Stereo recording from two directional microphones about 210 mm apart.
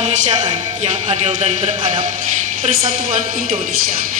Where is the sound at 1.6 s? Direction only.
35° right (ahead or behind).